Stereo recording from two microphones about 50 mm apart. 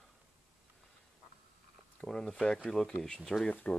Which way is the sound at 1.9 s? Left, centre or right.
Centre.